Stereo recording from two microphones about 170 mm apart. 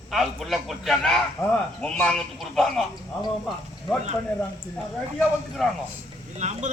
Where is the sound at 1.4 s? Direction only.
20° left (ahead or behind).